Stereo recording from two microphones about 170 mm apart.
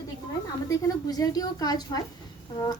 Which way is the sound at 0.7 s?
20° left (ahead or behind).